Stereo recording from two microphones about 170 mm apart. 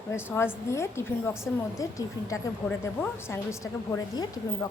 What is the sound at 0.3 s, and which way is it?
A woman's voice, 15° left (ahead or behind).